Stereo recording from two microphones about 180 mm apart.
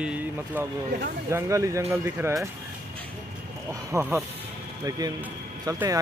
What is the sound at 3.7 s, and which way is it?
Speech, 15° right (ahead or behind).